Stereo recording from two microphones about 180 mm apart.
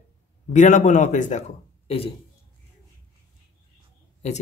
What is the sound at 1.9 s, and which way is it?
Speech, 30° left (ahead or behind).